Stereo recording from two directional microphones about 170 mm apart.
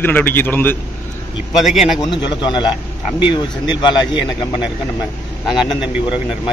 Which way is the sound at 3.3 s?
25° left (ahead or behind).